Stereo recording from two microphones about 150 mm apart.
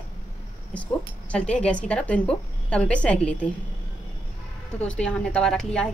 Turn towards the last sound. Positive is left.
turn(degrees=5)  # may be behind; listen again after turning